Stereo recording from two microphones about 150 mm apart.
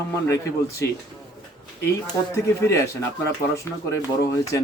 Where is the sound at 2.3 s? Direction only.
20° left (ahead or behind).